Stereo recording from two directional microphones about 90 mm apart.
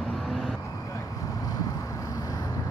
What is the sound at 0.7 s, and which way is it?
Vehicle, 40° left (ahead or behind).